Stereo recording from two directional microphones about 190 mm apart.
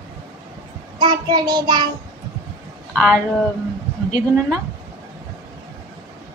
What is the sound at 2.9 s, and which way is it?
Speech, 5° left (ahead or behind).